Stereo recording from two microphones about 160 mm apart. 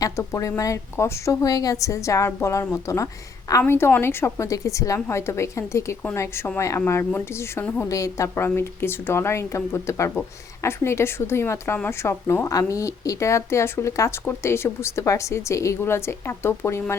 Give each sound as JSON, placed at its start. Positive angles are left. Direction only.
{"t": 0.0, "sound": "a woman's voice", "side_deg": 20}